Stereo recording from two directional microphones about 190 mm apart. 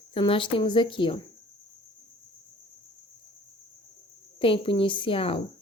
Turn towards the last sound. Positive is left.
turn(degrees=30)  # may be behind; listen again after turning